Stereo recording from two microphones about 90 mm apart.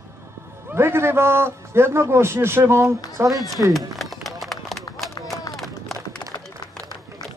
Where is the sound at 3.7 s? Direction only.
Centre (ahead or behind).